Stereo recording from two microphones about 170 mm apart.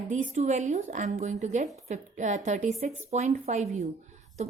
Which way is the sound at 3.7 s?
40° right (ahead or behind).